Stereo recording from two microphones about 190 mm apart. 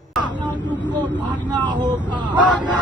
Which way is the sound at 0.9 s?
25° right (ahead or behind).